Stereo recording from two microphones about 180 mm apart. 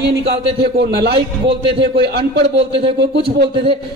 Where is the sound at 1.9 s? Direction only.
65° right (ahead or behind).